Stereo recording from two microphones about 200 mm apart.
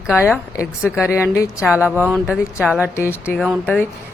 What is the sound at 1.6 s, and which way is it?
Speech, 5° right (ahead or behind).